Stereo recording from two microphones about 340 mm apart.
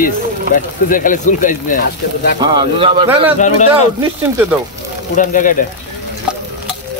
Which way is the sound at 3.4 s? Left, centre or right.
Left.